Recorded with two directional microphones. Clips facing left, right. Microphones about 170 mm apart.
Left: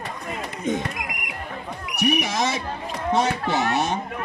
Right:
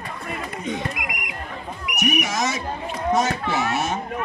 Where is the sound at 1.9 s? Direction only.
30° left (ahead or behind).